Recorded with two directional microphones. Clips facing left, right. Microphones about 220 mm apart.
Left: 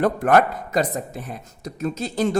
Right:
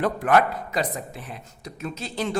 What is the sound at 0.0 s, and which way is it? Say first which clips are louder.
Speech: left 3 dB; 45° left (ahead or behind).